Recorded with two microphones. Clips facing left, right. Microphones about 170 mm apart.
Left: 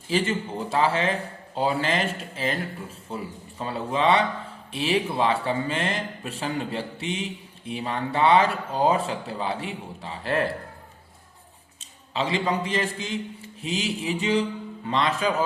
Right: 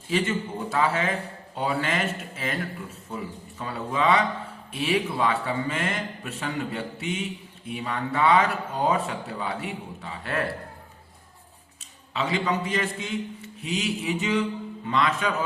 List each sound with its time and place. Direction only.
0.1 s speech: 30° left (ahead or behind)
11.8 s a man's voice: 30° left (ahead or behind)